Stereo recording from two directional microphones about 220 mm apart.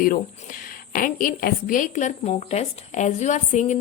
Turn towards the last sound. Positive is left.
turn(degrees=35)  # may be behind; listen again after turning